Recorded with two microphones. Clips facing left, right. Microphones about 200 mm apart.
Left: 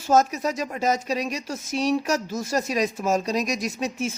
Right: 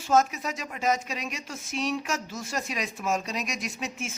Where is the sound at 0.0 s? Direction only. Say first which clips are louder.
Left 4 dB; 40° left (ahead or behind).